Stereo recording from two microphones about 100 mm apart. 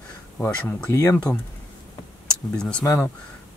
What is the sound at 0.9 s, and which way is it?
Speech, 30° left (ahead or behind).